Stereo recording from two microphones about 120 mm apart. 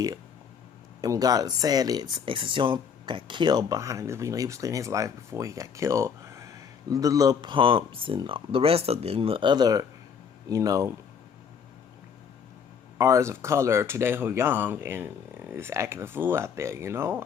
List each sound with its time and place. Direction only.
1.0 s speech: 30° right (ahead or behind)
13.0 s speech: 25° right (ahead or behind)